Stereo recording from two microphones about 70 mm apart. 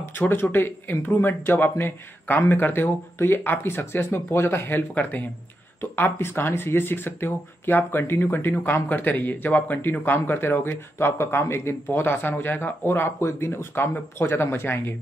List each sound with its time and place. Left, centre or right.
0.3 s speech: left